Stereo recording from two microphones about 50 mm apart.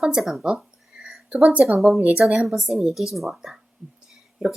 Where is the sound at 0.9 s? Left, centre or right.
Right.